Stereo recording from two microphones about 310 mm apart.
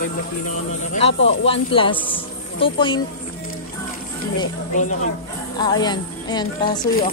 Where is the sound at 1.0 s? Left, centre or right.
Centre.